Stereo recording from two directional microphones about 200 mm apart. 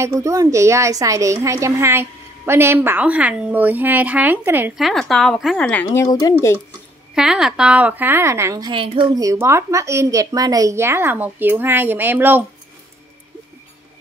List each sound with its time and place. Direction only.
0.0 s a woman's voice: 15° right (ahead or behind); by 6.0 s 5° left (ahead or behind)
6.0 s speech: 20° left (ahead or behind)
7.2 s a woman's voice: 5° right (ahead or behind)